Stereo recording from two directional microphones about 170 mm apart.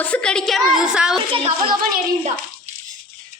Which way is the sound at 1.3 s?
30° right (ahead or behind).